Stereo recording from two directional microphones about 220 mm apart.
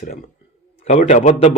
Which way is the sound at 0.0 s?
35° left (ahead or behind).